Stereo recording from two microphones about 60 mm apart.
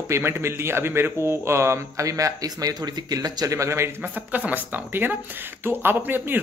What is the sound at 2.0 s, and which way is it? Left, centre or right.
Speech, right.